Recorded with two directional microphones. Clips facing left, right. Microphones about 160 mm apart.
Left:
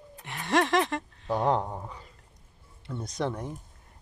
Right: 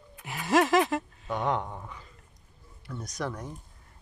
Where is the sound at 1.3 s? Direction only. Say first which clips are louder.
Left 3 dB; 35° left (ahead or behind).